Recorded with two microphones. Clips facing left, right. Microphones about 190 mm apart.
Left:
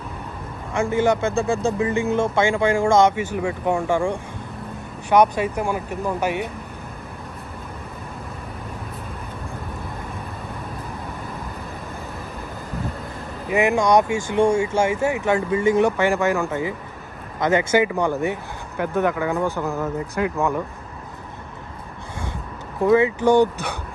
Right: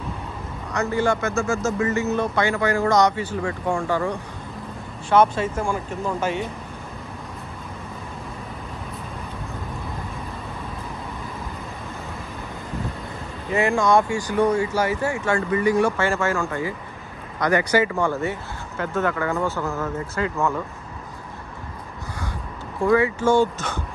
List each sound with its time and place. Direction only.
0.8 s speech: 20° left (ahead or behind)
1.3 s speech: 30° left (ahead or behind)
1.8 s speech: 15° left (ahead or behind)
13.5 s speech: 20° left (ahead or behind)
22.8 s speech: 20° left (ahead or behind)